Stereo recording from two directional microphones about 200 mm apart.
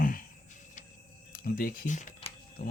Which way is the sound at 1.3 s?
45° left (ahead or behind).